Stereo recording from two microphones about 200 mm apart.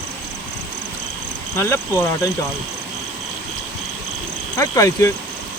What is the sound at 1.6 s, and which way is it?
Speech, 15° left (ahead or behind).